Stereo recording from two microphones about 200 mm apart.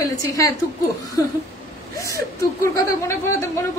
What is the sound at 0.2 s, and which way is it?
Speech, 15° left (ahead or behind).